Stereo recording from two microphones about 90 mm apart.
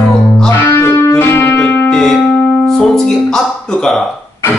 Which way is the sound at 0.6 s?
25° left (ahead or behind).